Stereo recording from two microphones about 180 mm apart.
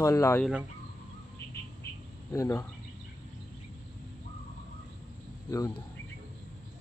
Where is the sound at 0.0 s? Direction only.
15° left (ahead or behind).